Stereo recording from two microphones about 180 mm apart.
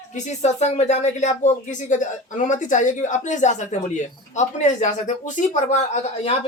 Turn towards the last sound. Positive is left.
turn(degrees=40)  # may be behind; listen again after turning